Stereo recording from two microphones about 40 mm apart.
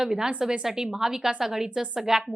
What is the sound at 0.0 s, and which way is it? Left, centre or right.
A woman's voice, centre.